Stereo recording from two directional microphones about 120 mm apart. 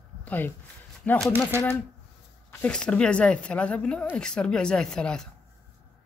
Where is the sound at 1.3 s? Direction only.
20° right (ahead or behind).